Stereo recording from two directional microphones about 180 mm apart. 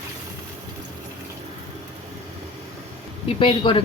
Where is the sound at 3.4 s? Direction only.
30° left (ahead or behind).